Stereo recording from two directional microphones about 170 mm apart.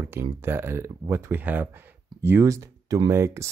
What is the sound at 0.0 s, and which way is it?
Speech, 15° right (ahead or behind).